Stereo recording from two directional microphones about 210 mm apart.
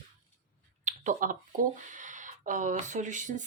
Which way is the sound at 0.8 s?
35° right (ahead or behind).